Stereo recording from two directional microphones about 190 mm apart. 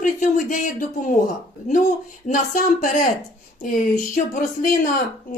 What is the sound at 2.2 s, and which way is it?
Speech, 40° left (ahead or behind).